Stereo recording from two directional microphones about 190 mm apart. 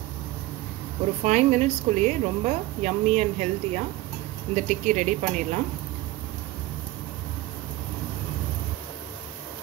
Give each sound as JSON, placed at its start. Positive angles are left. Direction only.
{"t": 1.2, "sound": "speech", "side_deg": -40}